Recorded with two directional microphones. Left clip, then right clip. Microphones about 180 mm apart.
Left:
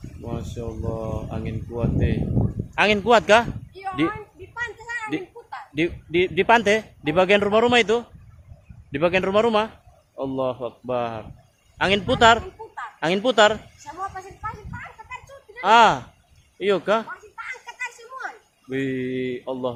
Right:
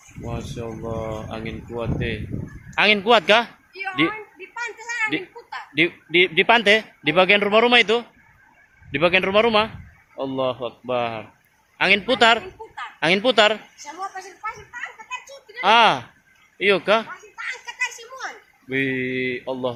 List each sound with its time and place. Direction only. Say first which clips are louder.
0.3 s a man's voice: right 1 dB; centre (ahead or behind)
4.6 s a sound: right 4 dB; 5° right (ahead or behind)
5.7 s speech: right 5 dB; 5° left (ahead or behind)
15.6 s speech: even; 5° left (ahead or behind)
17.1 s a sound: right 2 dB; 20° right (ahead or behind)
18.7 s speech: right 3 dB; 5° left (ahead or behind)